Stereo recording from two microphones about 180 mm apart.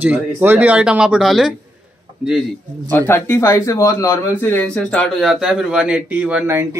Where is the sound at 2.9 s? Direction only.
10° left (ahead or behind).